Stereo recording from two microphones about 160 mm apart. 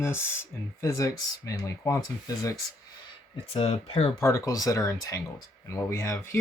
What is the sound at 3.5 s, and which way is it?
Speech, 40° left (ahead or behind).